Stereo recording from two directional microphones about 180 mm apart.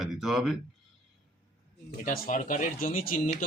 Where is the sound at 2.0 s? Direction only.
45° left (ahead or behind).